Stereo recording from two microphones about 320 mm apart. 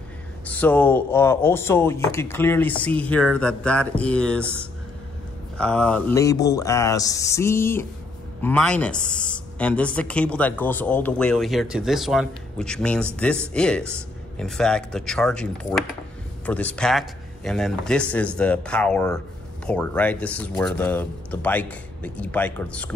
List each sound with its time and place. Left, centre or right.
0.5 s speech: centre
5.6 s a sound: centre
8.4 s speech: centre